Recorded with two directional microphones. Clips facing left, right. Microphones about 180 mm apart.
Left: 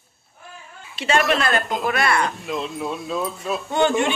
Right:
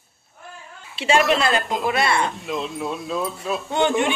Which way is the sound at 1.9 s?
25° right (ahead or behind).